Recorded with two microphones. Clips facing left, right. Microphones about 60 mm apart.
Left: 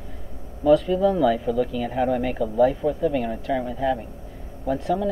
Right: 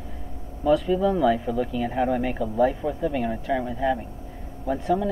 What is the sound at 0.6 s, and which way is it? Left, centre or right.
Speech, centre.